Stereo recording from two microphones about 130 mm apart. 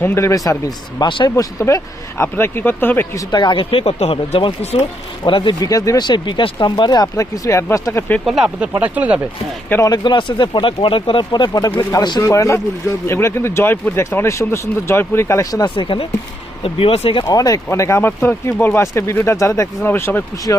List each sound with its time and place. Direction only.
0.0 s speech: 20° left (ahead or behind)
0.9 s speech: 35° left (ahead or behind)
1.5 s speech: 20° left (ahead or behind)
3.3 s speech: 35° left (ahead or behind); by 4.9 s 55° left (ahead or behind)
5.2 s speech: 40° left (ahead or behind); by 8.2 s 20° left (ahead or behind)
8.2 s speech: 5° right (ahead or behind)
9.6 s speech: 15° left (ahead or behind)
9.9 s speech: 35° left (ahead or behind)
15.7 s speech: 40° left (ahead or behind)
17.2 s speech: 25° left (ahead or behind)